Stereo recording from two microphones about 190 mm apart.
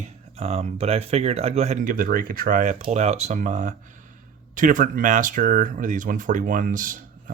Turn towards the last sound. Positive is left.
turn(degrees=-45)  # may be behind; listen again after turning